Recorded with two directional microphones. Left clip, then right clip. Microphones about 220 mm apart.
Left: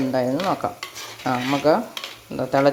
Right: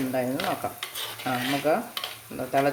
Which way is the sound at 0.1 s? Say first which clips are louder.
Left 5 dB; 20° left (ahead or behind).